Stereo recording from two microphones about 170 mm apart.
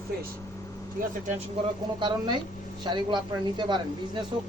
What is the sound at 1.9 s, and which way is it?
Speech, 25° right (ahead or behind).